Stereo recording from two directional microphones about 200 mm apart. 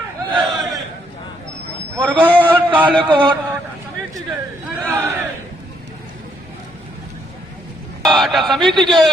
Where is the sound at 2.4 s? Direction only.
10° right (ahead or behind).